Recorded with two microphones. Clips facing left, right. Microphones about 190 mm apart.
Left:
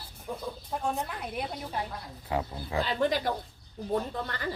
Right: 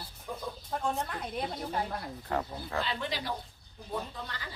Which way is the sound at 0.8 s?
10° left (ahead or behind).